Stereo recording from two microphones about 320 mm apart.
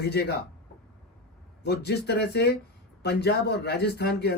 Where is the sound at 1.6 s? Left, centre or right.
Left.